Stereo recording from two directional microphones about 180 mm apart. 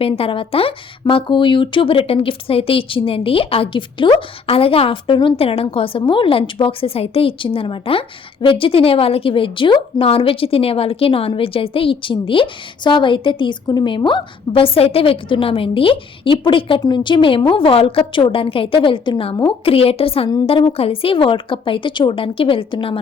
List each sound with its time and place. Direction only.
0.0 s speech: 30° left (ahead or behind)